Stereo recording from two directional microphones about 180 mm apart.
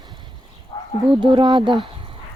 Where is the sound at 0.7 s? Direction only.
25° left (ahead or behind).